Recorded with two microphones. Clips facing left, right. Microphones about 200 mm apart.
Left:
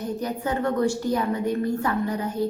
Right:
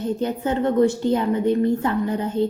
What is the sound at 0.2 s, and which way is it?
A woman's voice, 25° right (ahead or behind).